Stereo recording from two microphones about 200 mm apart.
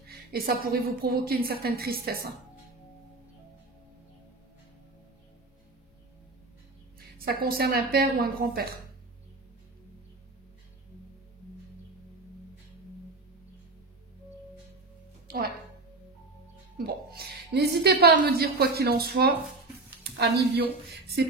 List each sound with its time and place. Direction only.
0.1 s speech: 50° right (ahead or behind)
7.2 s speech: 50° right (ahead or behind)
16.7 s speech: 50° right (ahead or behind)